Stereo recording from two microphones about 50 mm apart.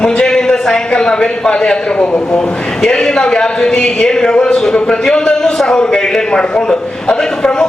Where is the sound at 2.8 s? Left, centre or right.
Centre.